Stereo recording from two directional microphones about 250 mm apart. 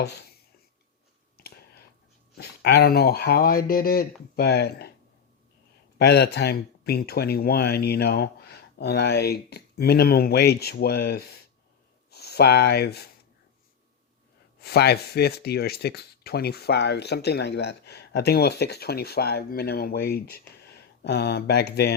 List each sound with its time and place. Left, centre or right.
0.0 s speech: left
1.4 s a sound: left
2.3 s speech: left
6.0 s speech: left
14.6 s speech: left